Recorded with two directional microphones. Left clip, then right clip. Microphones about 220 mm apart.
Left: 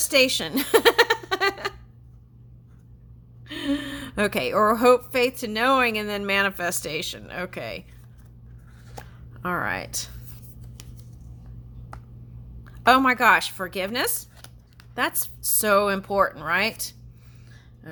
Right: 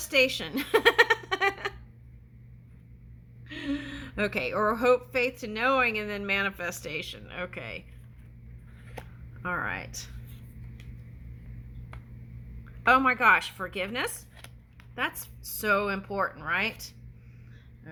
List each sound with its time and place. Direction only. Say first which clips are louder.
0.0 s a sound: left 5 dB; 40° left (ahead or behind)
3.4 s a woman's voice: left 6 dB; 45° left (ahead or behind)
9.4 s speech: left 5 dB; 40° left (ahead or behind)
12.8 s speech: left 4 dB; 40° left (ahead or behind)